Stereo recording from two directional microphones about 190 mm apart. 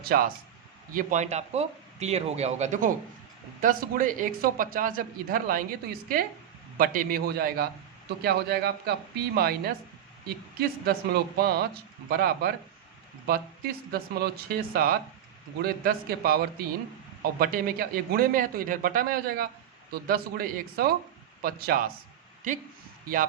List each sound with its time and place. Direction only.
0.1 s speech: 50° right (ahead or behind)
0.9 s speech: 40° right (ahead or behind)